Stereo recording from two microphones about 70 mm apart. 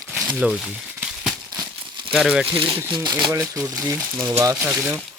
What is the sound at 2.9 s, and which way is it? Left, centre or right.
Speech, right.